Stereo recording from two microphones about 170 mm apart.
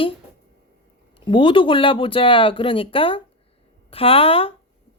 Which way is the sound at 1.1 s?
30° left (ahead or behind).